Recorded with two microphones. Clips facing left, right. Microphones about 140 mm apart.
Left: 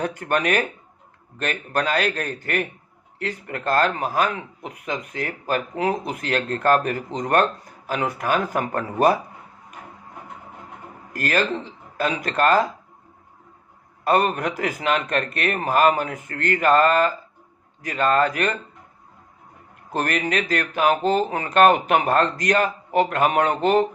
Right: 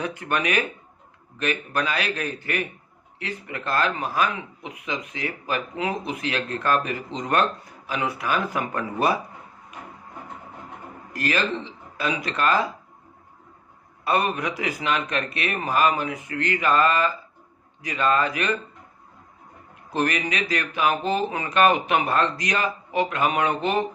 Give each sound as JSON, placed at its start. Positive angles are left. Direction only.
{"t": 0.0, "sound": "speech", "side_deg": 50}
{"t": 11.1, "sound": "speech", "side_deg": 55}
{"t": 14.0, "sound": "speech", "side_deg": 50}
{"t": 19.9, "sound": "speech", "side_deg": 50}